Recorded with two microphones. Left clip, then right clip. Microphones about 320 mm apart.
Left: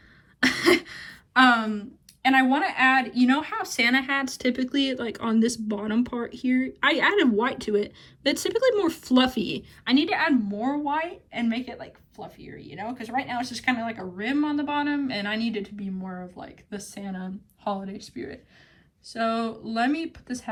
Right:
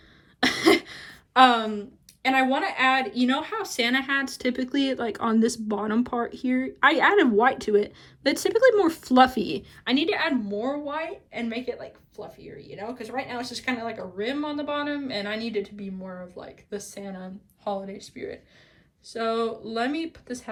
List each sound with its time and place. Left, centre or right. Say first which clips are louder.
0.3 s throat clearing: right 1 dB; centre
0.9 s a sound: right 2 dB; centre
2.3 s a woman's voice: left 1 dB; centre
14.8 s speech: left 3 dB; left
15.3 s a woman's voice: even; centre